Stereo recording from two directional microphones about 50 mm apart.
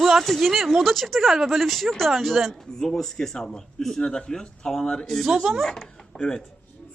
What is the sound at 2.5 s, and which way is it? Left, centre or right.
A man's voice, centre.